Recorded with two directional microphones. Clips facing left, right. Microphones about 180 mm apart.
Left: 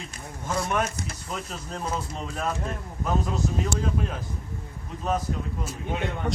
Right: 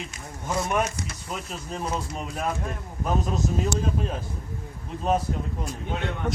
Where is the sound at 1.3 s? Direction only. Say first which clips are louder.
Right 1 dB; 5° right (ahead or behind).